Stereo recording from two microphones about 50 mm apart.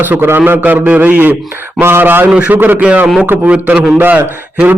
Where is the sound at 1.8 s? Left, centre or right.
Right.